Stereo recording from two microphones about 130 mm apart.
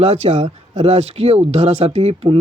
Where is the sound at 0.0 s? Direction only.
55° right (ahead or behind).